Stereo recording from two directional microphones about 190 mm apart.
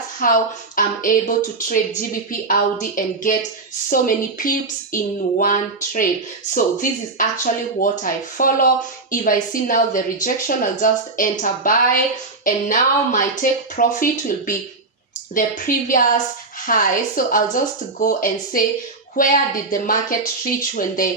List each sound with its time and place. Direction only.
0.2 s speech: 45° left (ahead or behind)
7.2 s speech: 45° left (ahead or behind)